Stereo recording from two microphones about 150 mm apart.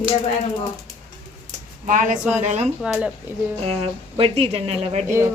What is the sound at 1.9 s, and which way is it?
Speech, 60° right (ahead or behind).